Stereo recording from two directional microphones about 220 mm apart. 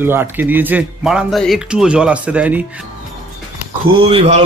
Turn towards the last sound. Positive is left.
turn(degrees=-25)  # may be behind; listen again after turning